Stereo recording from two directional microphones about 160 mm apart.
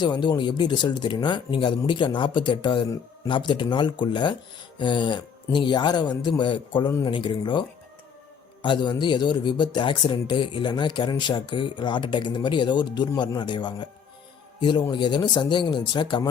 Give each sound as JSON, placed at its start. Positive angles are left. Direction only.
{"t": 0.0, "sound": "speech", "side_deg": 25}
{"t": 8.6, "sound": "speech", "side_deg": 30}